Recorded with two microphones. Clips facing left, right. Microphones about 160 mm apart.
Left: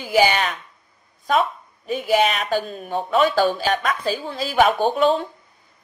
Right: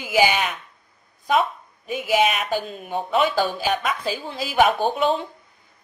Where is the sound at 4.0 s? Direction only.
50° left (ahead or behind).